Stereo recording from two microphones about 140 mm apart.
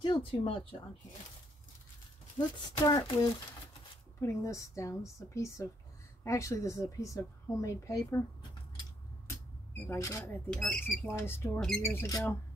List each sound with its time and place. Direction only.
0.0 s speech: 40° left (ahead or behind)
2.3 s a woman's voice: 25° left (ahead or behind)
9.8 s a woman's voice: 20° left (ahead or behind)
10.5 s speech: 5° left (ahead or behind)